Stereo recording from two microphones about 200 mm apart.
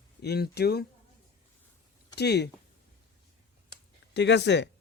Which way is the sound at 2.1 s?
55° left (ahead or behind).